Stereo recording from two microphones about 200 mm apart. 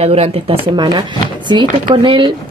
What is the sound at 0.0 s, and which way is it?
Speech, 30° right (ahead or behind).